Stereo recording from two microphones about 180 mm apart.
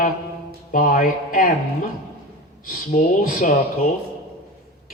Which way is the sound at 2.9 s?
45° left (ahead or behind).